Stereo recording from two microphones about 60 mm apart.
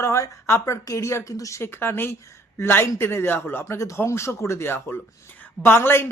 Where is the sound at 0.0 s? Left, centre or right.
Left.